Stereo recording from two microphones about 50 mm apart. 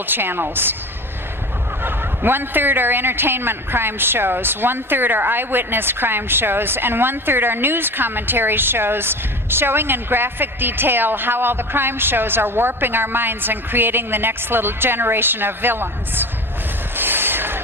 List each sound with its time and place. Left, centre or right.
0.1 s a man's voice: right
1.8 s a man's voice: right
16.9 s vehicle: right